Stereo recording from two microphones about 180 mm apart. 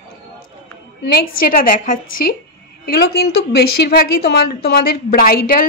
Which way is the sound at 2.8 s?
60° left (ahead or behind).